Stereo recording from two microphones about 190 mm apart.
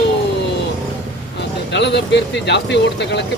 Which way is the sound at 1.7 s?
65° left (ahead or behind).